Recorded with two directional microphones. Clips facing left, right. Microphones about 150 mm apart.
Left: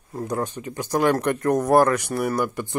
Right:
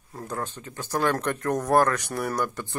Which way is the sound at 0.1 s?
15° left (ahead or behind).